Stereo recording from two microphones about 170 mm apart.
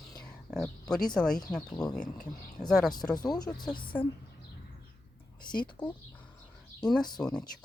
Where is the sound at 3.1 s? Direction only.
25° left (ahead or behind).